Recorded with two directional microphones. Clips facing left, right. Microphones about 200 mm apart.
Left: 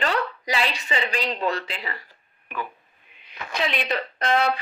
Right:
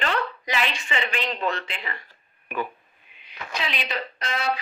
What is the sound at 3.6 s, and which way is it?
Speech, 55° left (ahead or behind).